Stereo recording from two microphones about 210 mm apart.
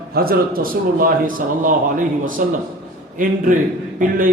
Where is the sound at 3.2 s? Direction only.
40° right (ahead or behind).